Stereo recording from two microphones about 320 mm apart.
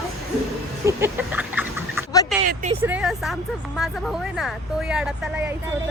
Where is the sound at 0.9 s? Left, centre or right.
Centre.